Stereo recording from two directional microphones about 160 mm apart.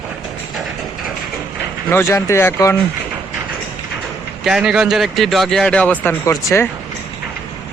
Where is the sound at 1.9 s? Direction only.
15° left (ahead or behind).